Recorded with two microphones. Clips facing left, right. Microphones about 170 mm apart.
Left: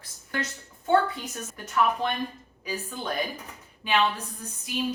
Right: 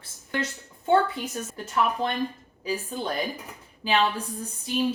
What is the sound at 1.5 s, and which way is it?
Speech, 30° right (ahead or behind).